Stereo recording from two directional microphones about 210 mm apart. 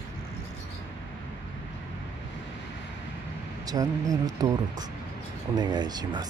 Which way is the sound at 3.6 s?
15° right (ahead or behind).